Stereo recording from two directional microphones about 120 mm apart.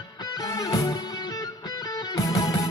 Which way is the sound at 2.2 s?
30° left (ahead or behind).